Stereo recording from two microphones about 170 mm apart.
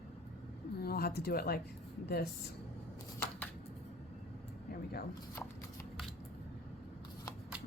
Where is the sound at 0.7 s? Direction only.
65° left (ahead or behind).